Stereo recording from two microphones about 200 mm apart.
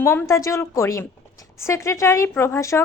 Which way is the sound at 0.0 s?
10° left (ahead or behind).